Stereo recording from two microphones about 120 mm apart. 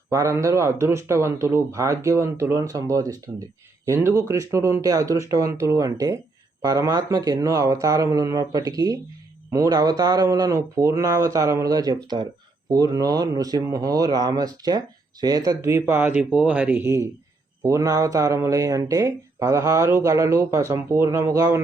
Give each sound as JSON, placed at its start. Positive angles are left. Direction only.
{"t": 0.1, "sound": "speech", "side_deg": -25}